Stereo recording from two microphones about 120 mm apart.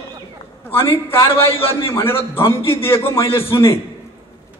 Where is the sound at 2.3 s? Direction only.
20° left (ahead or behind).